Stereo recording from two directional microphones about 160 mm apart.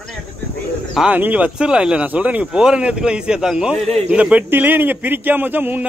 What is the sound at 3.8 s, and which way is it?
Speech, 40° right (ahead or behind).